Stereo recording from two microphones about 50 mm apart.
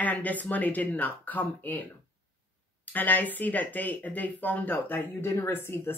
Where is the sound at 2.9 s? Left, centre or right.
Left.